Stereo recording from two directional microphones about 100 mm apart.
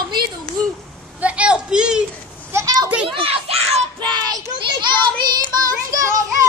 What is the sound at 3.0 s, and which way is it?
Speech, 70° right (ahead or behind).